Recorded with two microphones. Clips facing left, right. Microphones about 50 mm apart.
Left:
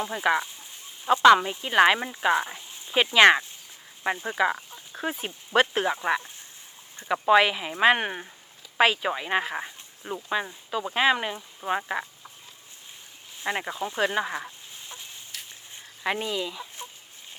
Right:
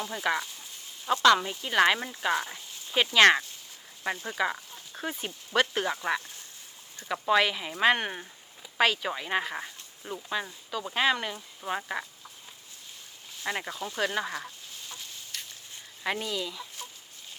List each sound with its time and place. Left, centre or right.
0.0 s speech: left
13.4 s speech: left